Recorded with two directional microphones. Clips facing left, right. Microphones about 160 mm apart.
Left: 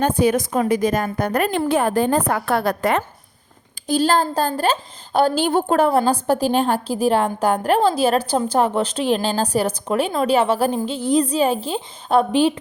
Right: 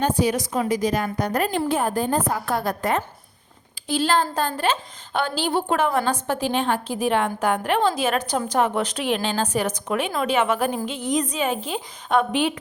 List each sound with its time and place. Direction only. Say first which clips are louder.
0.0 s a woman's voice: left 4 dB; 55° left (ahead or behind); by 3.0 s 70° left (ahead or behind)
3.8 s a woman's voice: left 4 dB; 40° left (ahead or behind)